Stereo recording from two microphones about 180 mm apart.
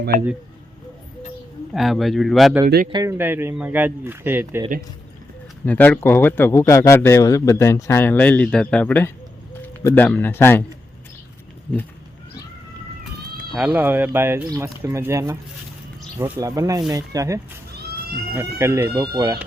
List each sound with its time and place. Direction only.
1.7 s a man's voice: centre (ahead or behind)
2.9 s speech: 20° right (ahead or behind)
5.6 s a man's voice: 10° left (ahead or behind)
13.6 s speech: 10° right (ahead or behind)